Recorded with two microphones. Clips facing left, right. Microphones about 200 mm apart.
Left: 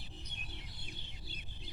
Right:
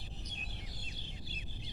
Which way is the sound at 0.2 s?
60° left (ahead or behind).